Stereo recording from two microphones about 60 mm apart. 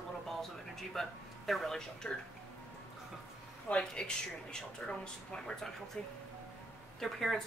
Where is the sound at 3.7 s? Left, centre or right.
Left.